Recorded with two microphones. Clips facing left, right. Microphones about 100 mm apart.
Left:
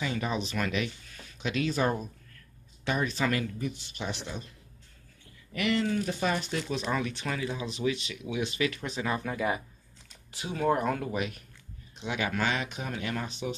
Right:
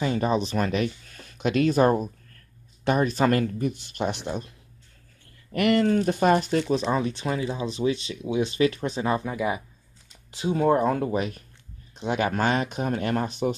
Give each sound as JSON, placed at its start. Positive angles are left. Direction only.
{"t": 0.0, "sound": "speech", "side_deg": -40}
{"t": 5.5, "sound": "speech", "side_deg": -50}
{"t": 6.9, "sound": "speech", "side_deg": -30}
{"t": 9.2, "sound": "speech", "side_deg": -10}
{"t": 10.3, "sound": "speech", "side_deg": -30}